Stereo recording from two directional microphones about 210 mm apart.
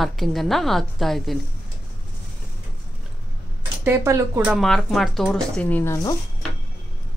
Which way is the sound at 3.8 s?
10° right (ahead or behind).